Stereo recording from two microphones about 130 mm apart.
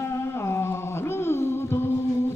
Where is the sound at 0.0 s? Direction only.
20° left (ahead or behind).